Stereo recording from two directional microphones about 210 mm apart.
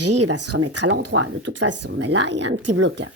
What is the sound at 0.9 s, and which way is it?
Speech, 80° right.